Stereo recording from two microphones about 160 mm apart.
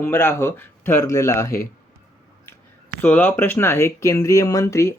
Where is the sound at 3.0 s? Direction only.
10° left (ahead or behind).